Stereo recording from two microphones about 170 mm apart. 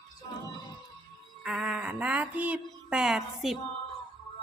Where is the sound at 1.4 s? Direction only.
Centre (ahead or behind).